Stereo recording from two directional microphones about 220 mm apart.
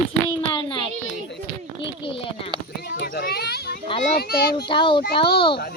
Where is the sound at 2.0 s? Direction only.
25° left (ahead or behind).